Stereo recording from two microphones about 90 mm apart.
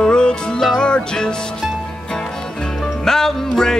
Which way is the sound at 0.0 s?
10° left (ahead or behind).